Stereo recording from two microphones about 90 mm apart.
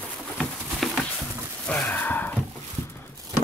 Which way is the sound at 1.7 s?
20° left (ahead or behind).